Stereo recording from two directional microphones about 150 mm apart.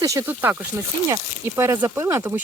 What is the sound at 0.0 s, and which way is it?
Speech, 20° right (ahead or behind).